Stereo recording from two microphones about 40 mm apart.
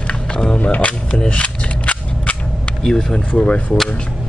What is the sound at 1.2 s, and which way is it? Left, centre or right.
Cap gun, left.